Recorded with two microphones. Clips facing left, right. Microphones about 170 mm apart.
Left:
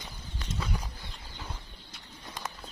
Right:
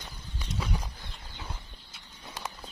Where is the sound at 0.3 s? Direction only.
10° right (ahead or behind).